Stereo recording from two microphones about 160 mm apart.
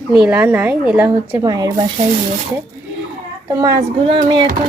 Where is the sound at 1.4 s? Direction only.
20° right (ahead or behind).